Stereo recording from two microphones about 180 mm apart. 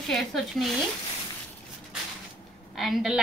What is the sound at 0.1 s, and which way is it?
Speech, centre (ahead or behind).